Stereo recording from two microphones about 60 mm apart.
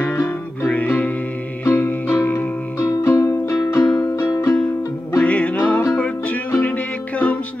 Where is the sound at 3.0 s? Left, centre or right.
Left.